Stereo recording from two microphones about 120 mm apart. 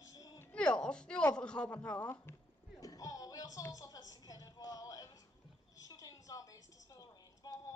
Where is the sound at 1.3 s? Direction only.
10° left (ahead or behind).